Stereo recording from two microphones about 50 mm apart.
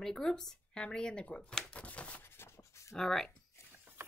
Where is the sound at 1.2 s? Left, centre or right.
Left.